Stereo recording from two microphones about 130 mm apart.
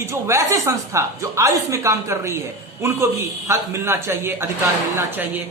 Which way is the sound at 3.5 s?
20° right (ahead or behind).